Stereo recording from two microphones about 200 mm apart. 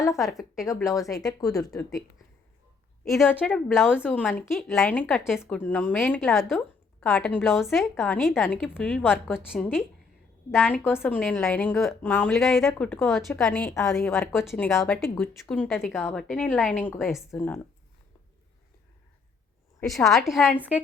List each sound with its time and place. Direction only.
0.2 s a woman's voice: centre (ahead or behind)
0.5 s speech: 15° left (ahead or behind)
1.9 s a woman's voice: centre (ahead or behind)
3.3 s a woman's voice: centre (ahead or behind)
4.0 s a woman's voice: 10° left (ahead or behind)
5.4 s a woman's voice: 10° left (ahead or behind)
10.7 s a woman's voice: 10° left (ahead or behind)
17.3 s speech: 10° left (ahead or behind)
19.8 s a woman's voice: centre (ahead or behind)